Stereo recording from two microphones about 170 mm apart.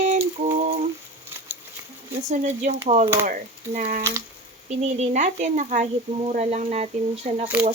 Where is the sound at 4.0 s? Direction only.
15° right (ahead or behind).